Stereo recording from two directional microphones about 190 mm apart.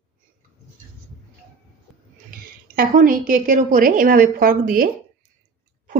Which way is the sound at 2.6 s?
50° right (ahead or behind).